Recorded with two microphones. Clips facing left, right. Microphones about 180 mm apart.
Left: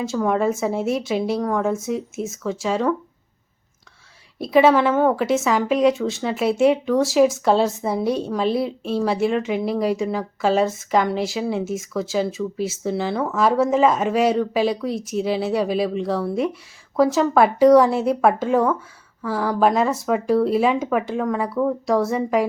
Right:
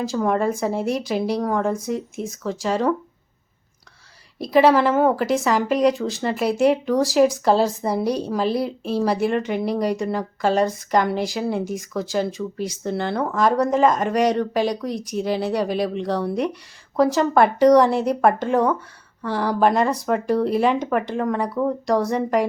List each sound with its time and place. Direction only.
0.0 s a woman's voice: centre (ahead or behind)
4.4 s a woman's voice: centre (ahead or behind)